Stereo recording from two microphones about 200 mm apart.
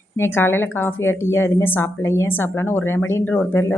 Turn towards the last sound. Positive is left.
turn(degrees=10)  # may be behind; listen again after turning